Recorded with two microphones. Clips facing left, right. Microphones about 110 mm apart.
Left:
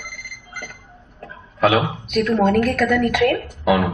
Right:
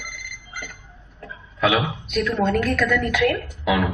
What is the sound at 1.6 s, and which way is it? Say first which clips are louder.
A woman's voice: left 4 dB; 45° left (ahead or behind).